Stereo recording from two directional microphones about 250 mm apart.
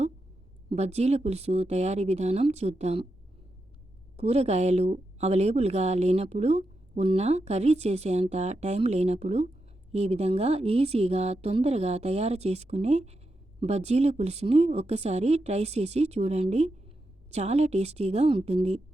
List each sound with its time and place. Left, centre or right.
0.7 s a woman's voice: right
4.2 s a woman's voice: right